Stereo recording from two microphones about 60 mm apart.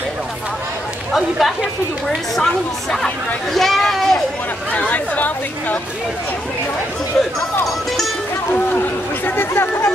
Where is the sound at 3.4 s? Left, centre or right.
Centre.